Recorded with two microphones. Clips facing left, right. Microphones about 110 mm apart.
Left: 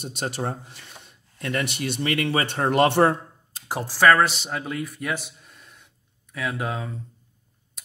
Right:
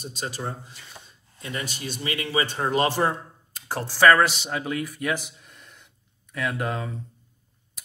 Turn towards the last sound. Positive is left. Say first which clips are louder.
# even
turn(degrees=0)  # may be behind; listen again after turning